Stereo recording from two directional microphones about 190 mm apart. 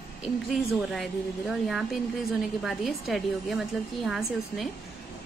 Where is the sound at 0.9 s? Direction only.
Centre (ahead or behind).